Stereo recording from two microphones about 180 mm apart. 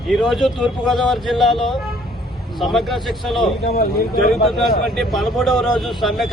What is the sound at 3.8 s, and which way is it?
Speech, 60° left (ahead or behind).